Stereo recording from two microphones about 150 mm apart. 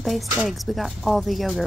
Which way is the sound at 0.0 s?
Centre (ahead or behind).